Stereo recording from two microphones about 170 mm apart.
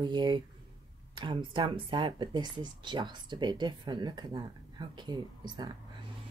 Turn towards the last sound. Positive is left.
turn(degrees=-25)  # may be behind; listen again after turning